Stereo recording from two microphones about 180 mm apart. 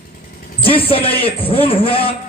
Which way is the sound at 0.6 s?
30° left (ahead or behind).